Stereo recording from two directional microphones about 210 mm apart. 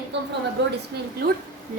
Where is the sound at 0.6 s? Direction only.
50° right (ahead or behind).